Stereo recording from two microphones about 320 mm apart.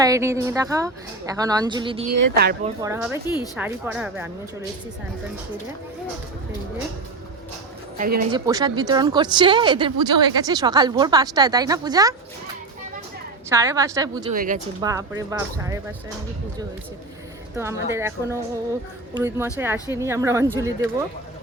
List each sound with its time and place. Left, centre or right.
0.0 s speech: centre
2.3 s speech: right
2.8 s speech: centre
7.9 s speech: right
8.3 s speech: centre
13.5 s speech: centre
14.3 s speech: right
14.8 s speech: centre
17.9 s speech: centre